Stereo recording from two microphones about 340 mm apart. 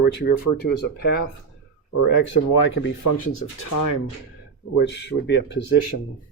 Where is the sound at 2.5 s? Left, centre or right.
Left.